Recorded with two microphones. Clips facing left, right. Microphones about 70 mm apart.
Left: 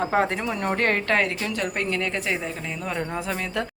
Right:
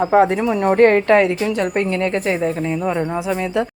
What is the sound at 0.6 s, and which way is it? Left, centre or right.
Speech, right.